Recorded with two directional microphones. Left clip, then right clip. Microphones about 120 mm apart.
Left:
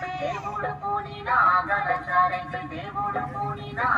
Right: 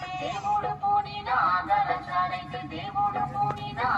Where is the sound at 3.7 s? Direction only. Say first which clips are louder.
Left 5 dB; 10° right (ahead or behind).